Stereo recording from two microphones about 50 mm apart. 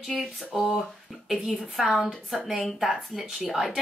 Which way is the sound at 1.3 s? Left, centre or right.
Centre.